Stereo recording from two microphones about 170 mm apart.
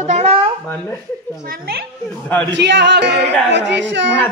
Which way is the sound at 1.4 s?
60° right (ahead or behind).